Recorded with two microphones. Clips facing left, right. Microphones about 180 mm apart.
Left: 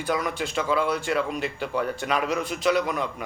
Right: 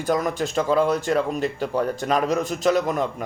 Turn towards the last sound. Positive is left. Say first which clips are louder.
# right 3 dB
turn(degrees=-45)  # may be behind; listen again after turning